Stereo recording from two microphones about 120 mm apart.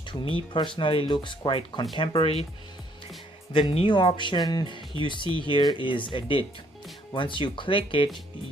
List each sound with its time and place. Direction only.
0.1 s speech: 45° left (ahead or behind)
3.5 s speech: 45° left (ahead or behind)